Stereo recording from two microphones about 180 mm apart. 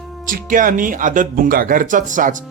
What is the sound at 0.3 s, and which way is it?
Speech, 50° right (ahead or behind).